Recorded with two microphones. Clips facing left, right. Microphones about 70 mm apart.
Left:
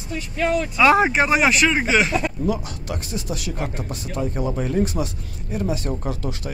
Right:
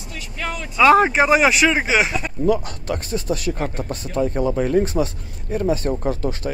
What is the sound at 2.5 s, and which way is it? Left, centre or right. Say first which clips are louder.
Speech: right 5 dB; right.